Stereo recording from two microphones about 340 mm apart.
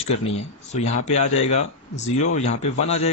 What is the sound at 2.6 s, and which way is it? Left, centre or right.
Speech, centre.